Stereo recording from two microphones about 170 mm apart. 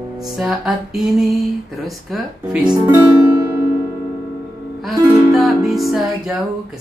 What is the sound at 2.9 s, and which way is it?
Music, 20° right (ahead or behind).